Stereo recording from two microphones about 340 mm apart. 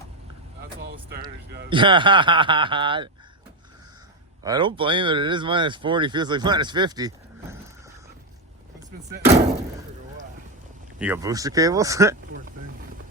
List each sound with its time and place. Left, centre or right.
0.8 s vehicle: right
1.7 s speech: centre
4.4 s speech: centre
9.0 s speech: right
11.0 s speech: centre